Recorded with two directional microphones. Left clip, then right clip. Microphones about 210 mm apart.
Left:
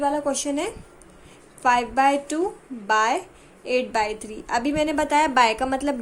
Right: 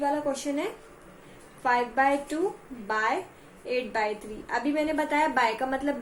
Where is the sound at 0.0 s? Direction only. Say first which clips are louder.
Left 4 dB; 50° left (ahead or behind).